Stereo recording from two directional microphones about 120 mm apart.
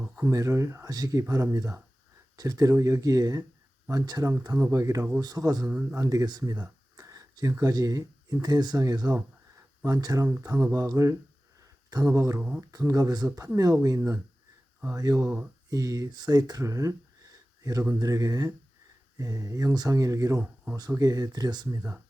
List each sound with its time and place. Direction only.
0.3 s speech: 25° right (ahead or behind)
5.6 s speech: 15° right (ahead or behind)
6.0 s speech: 30° right (ahead or behind)
10.3 s speech: 15° right (ahead or behind)
12.4 s speech: 15° right (ahead or behind)
12.7 s speech: 25° right (ahead or behind)